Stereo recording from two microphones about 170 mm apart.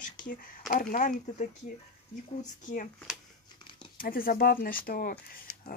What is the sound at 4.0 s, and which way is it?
Speech, 55° left (ahead or behind).